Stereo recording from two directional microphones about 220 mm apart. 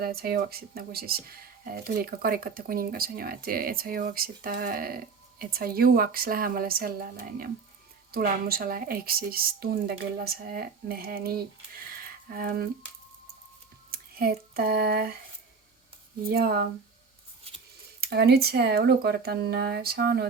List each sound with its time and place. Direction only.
0.0 s a woman's voice: 45° right (ahead or behind)
13.9 s a sound: 45° right (ahead or behind)
16.3 s a woman's voice: 45° right (ahead or behind)
18.0 s a woman's voice: 45° right (ahead or behind)